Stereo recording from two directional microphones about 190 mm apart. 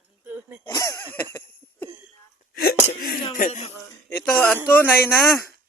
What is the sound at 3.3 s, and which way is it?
Speech, 40° left (ahead or behind).